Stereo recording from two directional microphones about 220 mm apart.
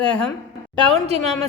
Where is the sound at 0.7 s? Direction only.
25° right (ahead or behind).